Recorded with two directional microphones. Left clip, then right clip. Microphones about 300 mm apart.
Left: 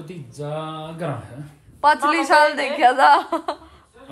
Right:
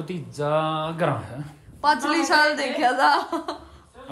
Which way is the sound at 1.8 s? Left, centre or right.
Centre.